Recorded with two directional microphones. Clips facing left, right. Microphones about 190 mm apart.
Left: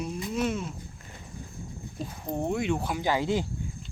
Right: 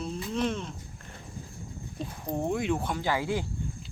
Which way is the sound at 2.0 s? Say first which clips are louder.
Even; centre (ahead or behind).